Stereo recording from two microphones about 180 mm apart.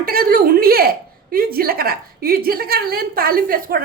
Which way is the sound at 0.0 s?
55° right (ahead or behind).